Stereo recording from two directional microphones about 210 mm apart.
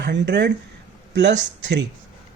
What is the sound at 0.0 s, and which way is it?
Speech, 55° right (ahead or behind).